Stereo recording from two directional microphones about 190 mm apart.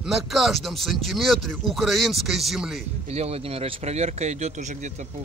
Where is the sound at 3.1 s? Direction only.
35° right (ahead or behind).